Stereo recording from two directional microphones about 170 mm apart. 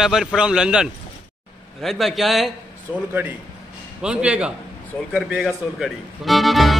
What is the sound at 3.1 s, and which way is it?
A man's voice, 10° right (ahead or behind).